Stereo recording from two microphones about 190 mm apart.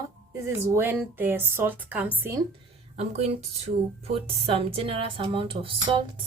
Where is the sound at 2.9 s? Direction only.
35° right (ahead or behind).